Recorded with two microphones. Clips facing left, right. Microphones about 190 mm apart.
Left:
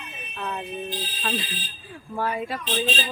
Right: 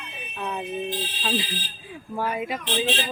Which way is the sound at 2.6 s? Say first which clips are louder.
Right 1 dB; 65° right (ahead or behind).